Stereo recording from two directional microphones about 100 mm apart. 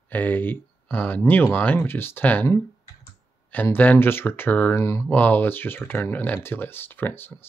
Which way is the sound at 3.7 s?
20° left (ahead or behind).